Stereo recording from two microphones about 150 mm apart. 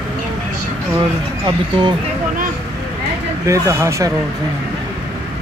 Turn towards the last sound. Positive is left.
turn(degrees=-20)  # may be behind; listen again after turning